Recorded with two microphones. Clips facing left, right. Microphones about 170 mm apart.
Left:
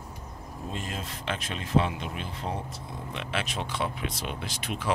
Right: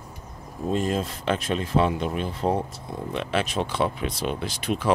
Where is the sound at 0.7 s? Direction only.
40° right (ahead or behind).